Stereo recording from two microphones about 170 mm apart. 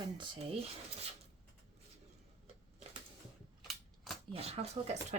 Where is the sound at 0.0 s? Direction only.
30° right (ahead or behind).